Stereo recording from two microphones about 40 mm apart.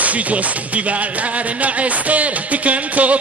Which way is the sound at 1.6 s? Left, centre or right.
Right.